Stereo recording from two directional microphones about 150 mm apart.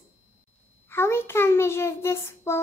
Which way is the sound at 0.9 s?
15° left (ahead or behind).